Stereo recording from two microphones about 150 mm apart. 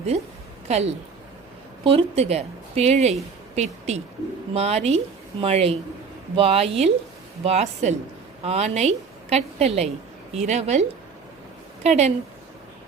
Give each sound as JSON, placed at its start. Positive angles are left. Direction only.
{"t": 0.7, "sound": "a woman's voice", "side_deg": -45}